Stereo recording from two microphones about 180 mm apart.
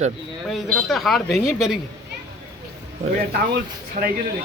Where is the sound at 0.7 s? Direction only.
Centre (ahead or behind).